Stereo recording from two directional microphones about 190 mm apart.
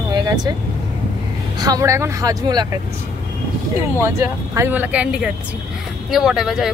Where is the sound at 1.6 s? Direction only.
15° right (ahead or behind).